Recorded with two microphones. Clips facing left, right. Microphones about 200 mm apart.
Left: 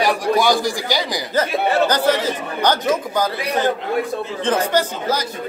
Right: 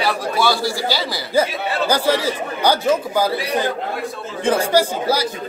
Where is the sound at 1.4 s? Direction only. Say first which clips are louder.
Left 2 dB; 10° right (ahead or behind).